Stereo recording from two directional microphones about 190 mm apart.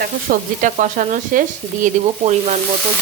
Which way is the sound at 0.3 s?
45° right (ahead or behind).